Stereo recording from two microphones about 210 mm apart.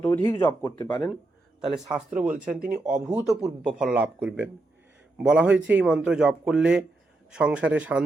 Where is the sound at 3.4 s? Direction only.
5° right (ahead or behind).